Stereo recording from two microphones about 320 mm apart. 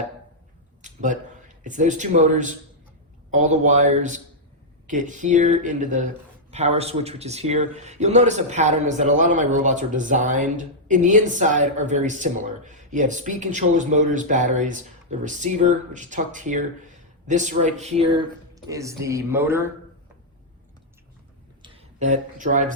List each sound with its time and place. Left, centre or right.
0.8 s a sound: right
1.6 s speech: right; by 19.6 s centre
21.6 s speech: centre